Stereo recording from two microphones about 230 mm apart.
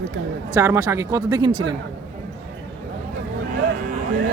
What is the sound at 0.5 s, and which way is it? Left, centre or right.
Speech, centre.